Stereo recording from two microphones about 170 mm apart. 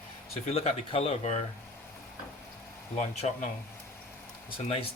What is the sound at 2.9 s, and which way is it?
Speech, 40° left (ahead or behind).